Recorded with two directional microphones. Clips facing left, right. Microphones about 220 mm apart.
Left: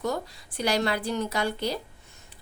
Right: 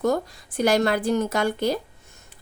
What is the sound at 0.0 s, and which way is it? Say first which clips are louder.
A woman's voice: right 7 dB; 50° right (ahead or behind).